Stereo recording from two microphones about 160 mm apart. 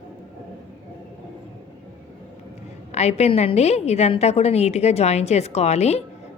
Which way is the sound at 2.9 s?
45° left (ahead or behind).